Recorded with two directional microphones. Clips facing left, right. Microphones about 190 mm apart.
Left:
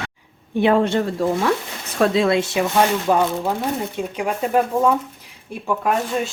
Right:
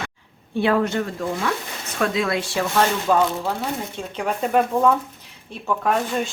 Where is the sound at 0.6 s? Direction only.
25° left (ahead or behind).